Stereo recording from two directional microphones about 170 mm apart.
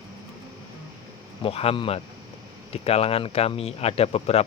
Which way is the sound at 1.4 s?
35° left (ahead or behind).